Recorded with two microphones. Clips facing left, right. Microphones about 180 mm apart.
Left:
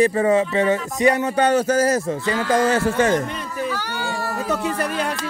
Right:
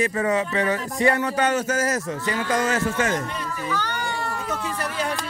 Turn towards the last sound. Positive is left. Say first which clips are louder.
# even
turn(degrees=10)  # may be behind; listen again after turning